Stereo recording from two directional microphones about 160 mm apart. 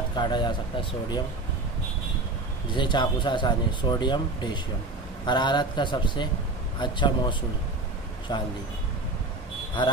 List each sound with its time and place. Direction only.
0.1 s speech: 30° left (ahead or behind)
2.7 s speech: 30° left (ahead or behind)
9.8 s speech: 30° left (ahead or behind)